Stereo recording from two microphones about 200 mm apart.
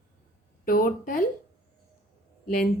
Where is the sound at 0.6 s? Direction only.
45° left (ahead or behind).